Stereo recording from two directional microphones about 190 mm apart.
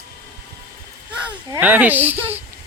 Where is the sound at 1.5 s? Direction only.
10° right (ahead or behind).